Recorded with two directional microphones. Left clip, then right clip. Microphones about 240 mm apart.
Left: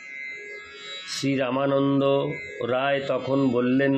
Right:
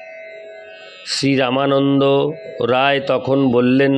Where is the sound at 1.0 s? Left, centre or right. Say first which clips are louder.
Right 9 dB; right.